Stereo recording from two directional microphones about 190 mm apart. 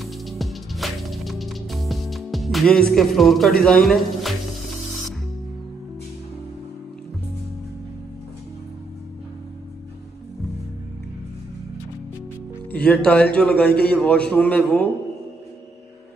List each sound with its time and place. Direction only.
0.0 s music: centre (ahead or behind)
12.7 s a man's voice: 5° left (ahead or behind)